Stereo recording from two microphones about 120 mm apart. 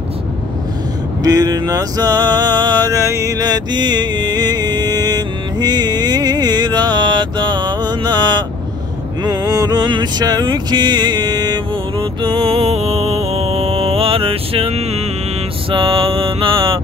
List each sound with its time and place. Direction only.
1.2 s a sound: 30° right (ahead or behind)
9.2 s music: 35° right (ahead or behind); by 15.0 s 60° right (ahead or behind)
15.7 s mantra: 45° right (ahead or behind)